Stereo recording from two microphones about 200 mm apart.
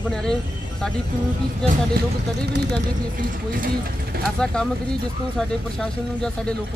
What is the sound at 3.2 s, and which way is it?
Speech, 45° right (ahead or behind).